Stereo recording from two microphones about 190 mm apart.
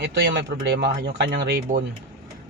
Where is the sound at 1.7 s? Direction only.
35° right (ahead or behind).